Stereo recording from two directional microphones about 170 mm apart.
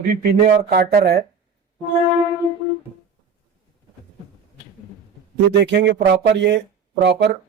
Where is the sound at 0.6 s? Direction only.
65° right (ahead or behind).